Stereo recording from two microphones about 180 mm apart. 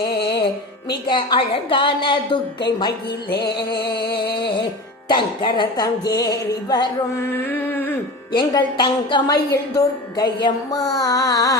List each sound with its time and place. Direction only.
1.0 s a woman's voice: 25° left (ahead or behind)
3.2 s music: 65° left (ahead or behind)
5.0 s a woman's voice: 25° left (ahead or behind)
6.7 s music: 15° left (ahead or behind)
8.3 s a woman's voice: 25° left (ahead or behind)